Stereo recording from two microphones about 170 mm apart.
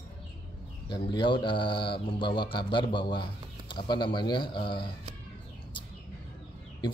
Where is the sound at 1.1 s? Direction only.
30° left (ahead or behind).